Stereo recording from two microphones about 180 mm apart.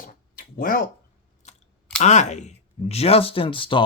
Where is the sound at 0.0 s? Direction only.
50° left (ahead or behind).